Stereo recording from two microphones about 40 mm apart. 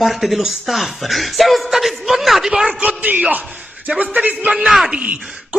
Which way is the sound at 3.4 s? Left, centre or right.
Right.